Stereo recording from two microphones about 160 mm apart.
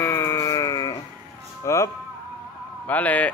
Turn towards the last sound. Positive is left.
turn(degrees=10)  # may be behind; listen again after turning